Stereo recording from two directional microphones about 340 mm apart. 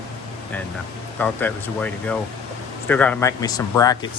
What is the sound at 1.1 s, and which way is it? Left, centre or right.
Speech, centre.